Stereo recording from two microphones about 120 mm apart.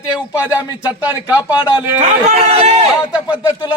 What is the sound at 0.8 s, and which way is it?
Speech, 10° right (ahead or behind).